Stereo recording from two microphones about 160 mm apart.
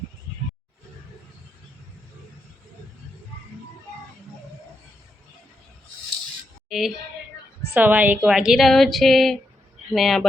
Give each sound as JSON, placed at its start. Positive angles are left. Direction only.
{"t": 6.7, "sound": "a woman's voice", "side_deg": 0}